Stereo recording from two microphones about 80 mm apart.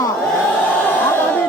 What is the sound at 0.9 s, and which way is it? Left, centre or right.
Crowd, left.